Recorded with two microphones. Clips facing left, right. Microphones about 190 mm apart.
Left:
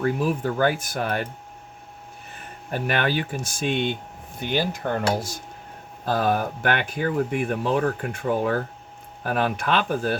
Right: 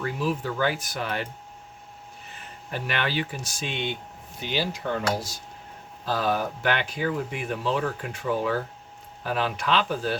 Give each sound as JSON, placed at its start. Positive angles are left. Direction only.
{"t": 0.0, "sound": "speech", "side_deg": 50}
{"t": 2.3, "sound": "speech", "side_deg": 50}
{"t": 6.1, "sound": "speech", "side_deg": 55}